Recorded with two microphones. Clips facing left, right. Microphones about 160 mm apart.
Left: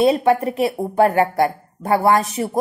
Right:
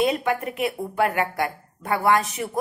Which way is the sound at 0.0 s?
30° left (ahead or behind).